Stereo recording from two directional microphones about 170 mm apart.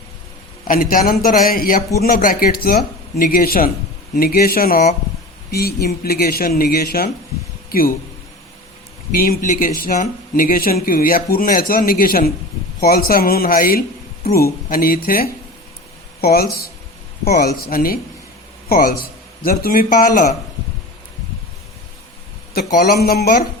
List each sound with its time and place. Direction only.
0.7 s speech: 55° left (ahead or behind)
9.1 s speech: 55° left (ahead or behind)
17.7 s speech: 60° left (ahead or behind)
22.5 s speech: 65° left (ahead or behind)